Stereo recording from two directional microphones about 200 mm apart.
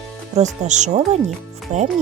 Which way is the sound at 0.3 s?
35° right (ahead or behind).